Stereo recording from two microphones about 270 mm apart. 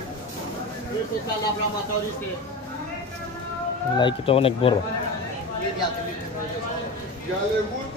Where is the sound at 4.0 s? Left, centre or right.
Centre.